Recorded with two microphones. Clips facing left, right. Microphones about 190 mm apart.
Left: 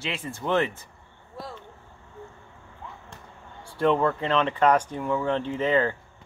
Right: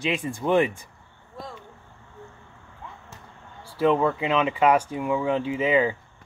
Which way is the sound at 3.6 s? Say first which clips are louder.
Right 1 dB; 5° right (ahead or behind).